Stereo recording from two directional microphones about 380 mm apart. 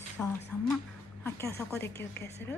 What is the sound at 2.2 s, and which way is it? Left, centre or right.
Speech, left.